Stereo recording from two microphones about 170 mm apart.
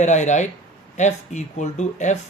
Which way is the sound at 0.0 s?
45° left (ahead or behind).